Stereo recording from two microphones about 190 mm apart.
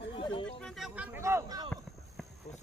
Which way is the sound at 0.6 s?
Centre (ahead or behind).